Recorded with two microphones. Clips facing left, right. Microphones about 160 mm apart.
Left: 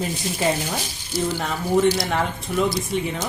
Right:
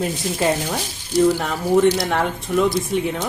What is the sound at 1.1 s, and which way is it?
Speech, centre (ahead or behind).